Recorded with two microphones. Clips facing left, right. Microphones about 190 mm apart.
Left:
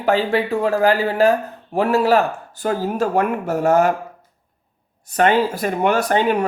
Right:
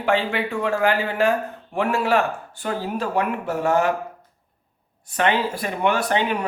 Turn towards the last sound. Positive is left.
turn(degrees=45)  # may be behind; listen again after turning